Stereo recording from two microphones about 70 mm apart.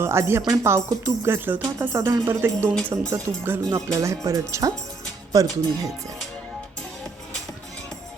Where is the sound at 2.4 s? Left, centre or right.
Right.